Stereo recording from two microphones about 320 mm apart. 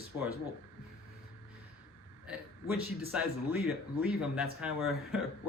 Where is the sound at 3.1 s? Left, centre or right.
Centre.